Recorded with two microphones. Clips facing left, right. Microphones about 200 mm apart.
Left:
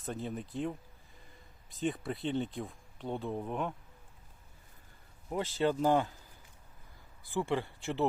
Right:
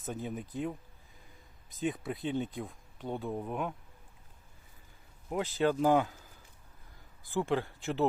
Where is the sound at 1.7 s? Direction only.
Centre (ahead or behind).